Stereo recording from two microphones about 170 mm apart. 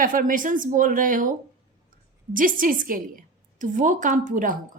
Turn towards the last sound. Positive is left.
turn(degrees=-50)  # may be behind; listen again after turning